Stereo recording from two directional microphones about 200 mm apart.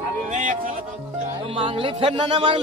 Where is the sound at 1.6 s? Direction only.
25° right (ahead or behind).